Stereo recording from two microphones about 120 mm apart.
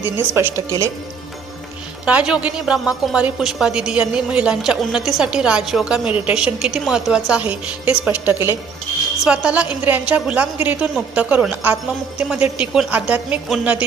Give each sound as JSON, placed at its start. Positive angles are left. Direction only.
{"t": 0.0, "sound": "speech", "side_deg": -20}
{"t": 2.0, "sound": "a woman's voice", "side_deg": -10}